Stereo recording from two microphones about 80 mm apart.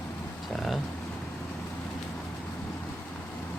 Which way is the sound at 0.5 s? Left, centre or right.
Centre.